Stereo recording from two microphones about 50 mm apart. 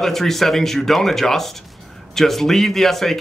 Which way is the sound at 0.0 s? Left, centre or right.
Centre.